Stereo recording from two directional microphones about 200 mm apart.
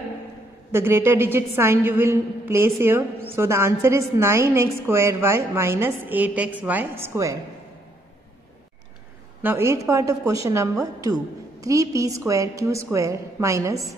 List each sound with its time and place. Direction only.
0.7 s a woman's voice: 10° right (ahead or behind)
9.4 s a woman's voice: 10° right (ahead or behind)